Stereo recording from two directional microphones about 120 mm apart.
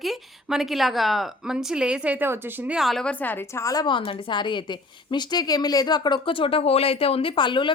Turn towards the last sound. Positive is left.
turn(degrees=45)  # may be behind; listen again after turning